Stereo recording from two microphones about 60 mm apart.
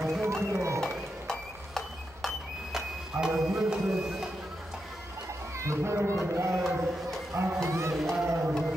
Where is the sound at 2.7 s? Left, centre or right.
Centre.